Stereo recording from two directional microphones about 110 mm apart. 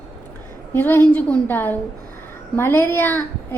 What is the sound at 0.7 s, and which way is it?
A woman's voice, 20° left (ahead or behind).